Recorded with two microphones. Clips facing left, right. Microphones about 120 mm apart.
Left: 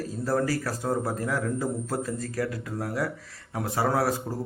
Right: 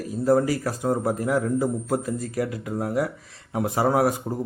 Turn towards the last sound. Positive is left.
turn(degrees=-20)  # may be behind; listen again after turning